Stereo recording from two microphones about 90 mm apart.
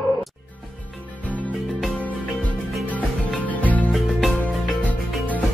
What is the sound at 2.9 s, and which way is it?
Music, 15° left (ahead or behind).